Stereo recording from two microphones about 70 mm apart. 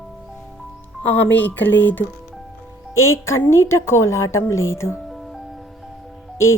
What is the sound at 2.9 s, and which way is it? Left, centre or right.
A woman's voice, left.